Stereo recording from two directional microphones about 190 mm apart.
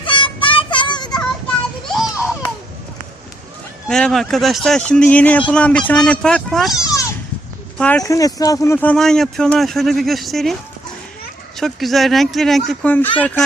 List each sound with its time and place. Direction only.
0.0 s child singing: 25° left (ahead or behind)
1.1 s child singing: 5° left (ahead or behind)
3.8 s speech: 5° left (ahead or behind)
6.8 s a sound: 15° left (ahead or behind)
7.8 s speech: 5° left (ahead or behind)
8.0 s speech: 20° left (ahead or behind)